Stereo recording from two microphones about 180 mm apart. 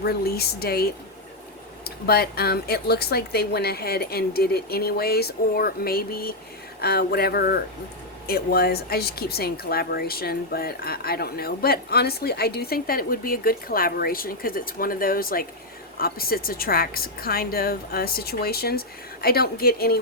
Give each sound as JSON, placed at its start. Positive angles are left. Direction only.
{"t": 0.0, "sound": "speech", "side_deg": 60}